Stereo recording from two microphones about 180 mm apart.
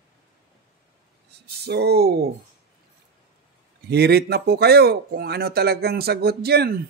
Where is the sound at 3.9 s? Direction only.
65° right (ahead or behind).